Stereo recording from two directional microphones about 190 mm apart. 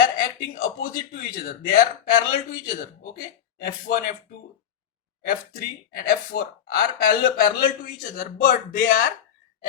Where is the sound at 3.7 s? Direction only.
45° left (ahead or behind).